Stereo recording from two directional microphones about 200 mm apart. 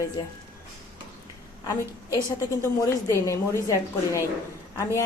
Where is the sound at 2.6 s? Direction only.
15° left (ahead or behind).